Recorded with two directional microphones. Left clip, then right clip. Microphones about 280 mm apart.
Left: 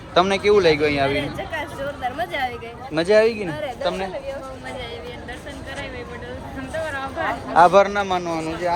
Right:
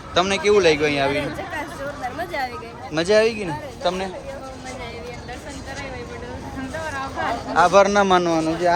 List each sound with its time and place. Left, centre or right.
0.1 s a man's voice: centre
7.5 s a man's voice: centre
7.9 s speech: right